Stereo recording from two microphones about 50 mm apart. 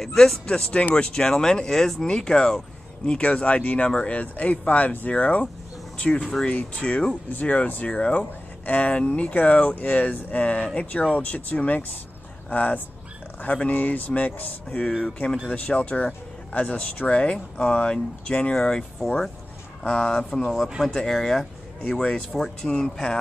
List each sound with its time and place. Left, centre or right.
0.0 s speech: centre
0.5 s speech: left
3.1 s speech: left; by 21.5 s centre
21.8 s speech: centre